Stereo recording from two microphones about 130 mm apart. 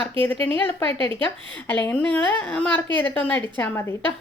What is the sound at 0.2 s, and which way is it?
A woman's voice, 15° left (ahead or behind).